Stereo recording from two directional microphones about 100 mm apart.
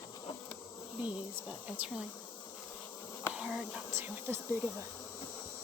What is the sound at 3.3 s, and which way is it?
Speech, 10° right (ahead or behind).